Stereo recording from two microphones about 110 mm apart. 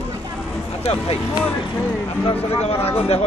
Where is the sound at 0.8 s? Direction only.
70° left (ahead or behind).